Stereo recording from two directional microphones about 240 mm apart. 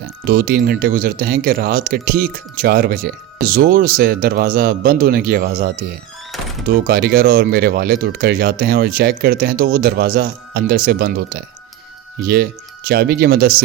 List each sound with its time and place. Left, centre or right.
0.3 s speech: right
6.8 s speech: right